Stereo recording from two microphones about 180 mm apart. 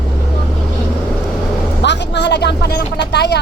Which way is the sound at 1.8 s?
75° left (ahead or behind).